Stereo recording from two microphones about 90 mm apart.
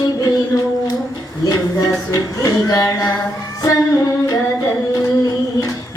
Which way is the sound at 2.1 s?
40° left (ahead or behind).